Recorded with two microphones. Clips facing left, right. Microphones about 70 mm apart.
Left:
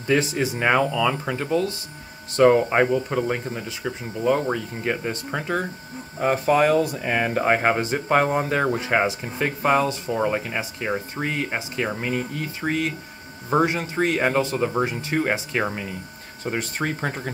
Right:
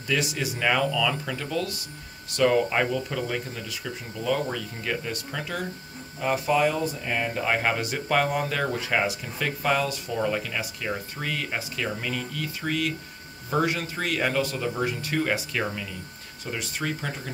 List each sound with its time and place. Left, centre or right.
0.0 s speech: left
6.6 s speech: left
7.4 s speech: left